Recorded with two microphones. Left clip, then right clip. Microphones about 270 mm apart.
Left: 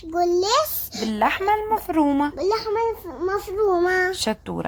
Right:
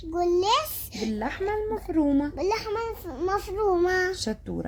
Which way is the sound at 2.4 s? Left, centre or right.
Right.